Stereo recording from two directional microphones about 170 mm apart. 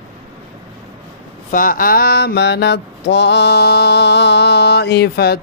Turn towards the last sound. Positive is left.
turn(degrees=70)  # may be behind; listen again after turning